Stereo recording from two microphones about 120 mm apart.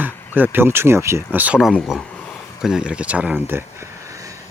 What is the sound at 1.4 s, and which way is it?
Speech, 5° right (ahead or behind).